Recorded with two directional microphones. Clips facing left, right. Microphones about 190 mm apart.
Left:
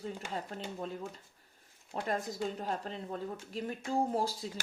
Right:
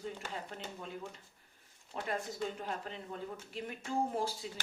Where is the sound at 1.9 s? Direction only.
40° left (ahead or behind).